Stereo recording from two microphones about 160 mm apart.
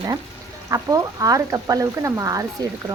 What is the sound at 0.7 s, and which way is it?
A woman's voice, 20° right (ahead or behind).